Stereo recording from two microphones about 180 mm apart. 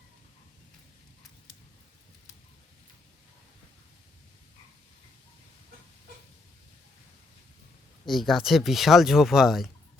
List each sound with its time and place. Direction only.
8.0 s speech: centre (ahead or behind)